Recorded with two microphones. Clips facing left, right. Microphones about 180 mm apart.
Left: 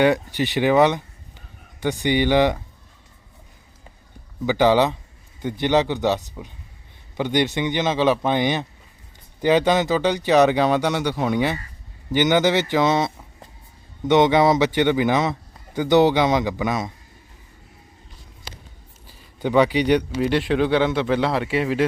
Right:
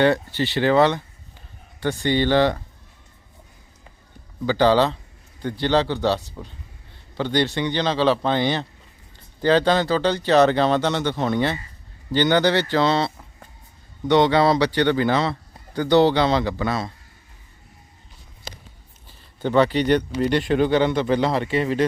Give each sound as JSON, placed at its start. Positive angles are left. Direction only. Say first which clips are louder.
{"t": 0.0, "sound": "a man's voice", "louder": "even", "side_deg": 15}
{"t": 4.4, "sound": "a man's voice", "louder": "even", "side_deg": 15}
{"t": 19.4, "sound": "speech", "louder": "left 1 dB", "side_deg": 10}